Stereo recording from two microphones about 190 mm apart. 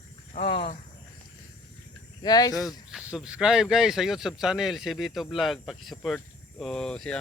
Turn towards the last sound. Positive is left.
turn(degrees=5)  # may be behind; listen again after turning